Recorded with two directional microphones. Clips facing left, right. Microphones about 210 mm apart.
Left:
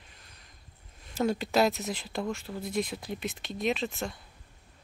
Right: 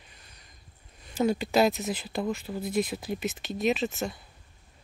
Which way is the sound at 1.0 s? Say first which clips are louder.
Right 3 dB; centre (ahead or behind).